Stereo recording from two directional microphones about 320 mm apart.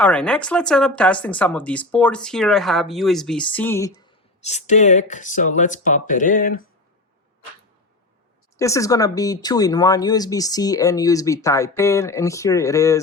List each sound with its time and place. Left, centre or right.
0.0 s speech: centre
4.4 s speech: left
8.5 s speech: centre